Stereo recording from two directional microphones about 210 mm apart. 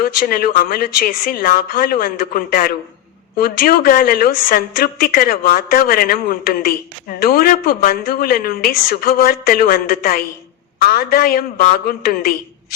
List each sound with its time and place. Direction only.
0.0 s a woman's voice: 45° left (ahead or behind)